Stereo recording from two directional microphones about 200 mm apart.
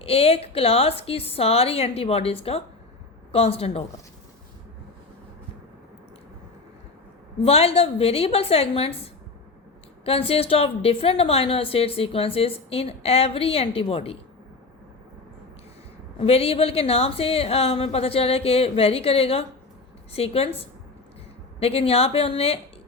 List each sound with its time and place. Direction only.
0.0 s a woman's voice: 30° left (ahead or behind)
7.4 s a woman's voice: 30° left (ahead or behind)
10.1 s a woman's voice: 30° left (ahead or behind)
16.1 s a woman's voice: 30° left (ahead or behind)
21.6 s a woman's voice: 30° left (ahead or behind)